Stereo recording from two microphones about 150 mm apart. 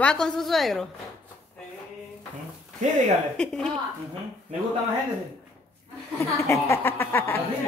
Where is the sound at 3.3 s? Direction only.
5° left (ahead or behind).